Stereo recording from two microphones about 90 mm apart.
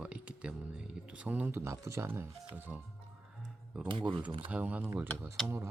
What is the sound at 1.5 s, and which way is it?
Speech, 30° right (ahead or behind).